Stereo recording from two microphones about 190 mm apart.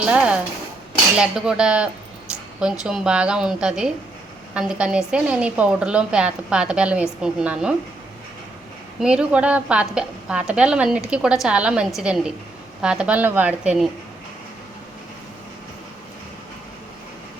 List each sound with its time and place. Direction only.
0.0 s a woman's voice: 5° right (ahead or behind)
9.0 s a woman's voice: 5° right (ahead or behind)